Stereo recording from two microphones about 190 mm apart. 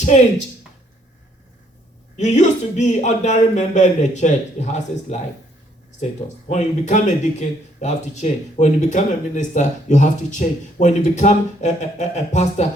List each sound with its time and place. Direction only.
2.1 s speech: 40° left (ahead or behind)